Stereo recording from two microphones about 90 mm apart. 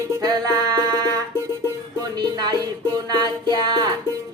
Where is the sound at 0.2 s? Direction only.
45° right (ahead or behind).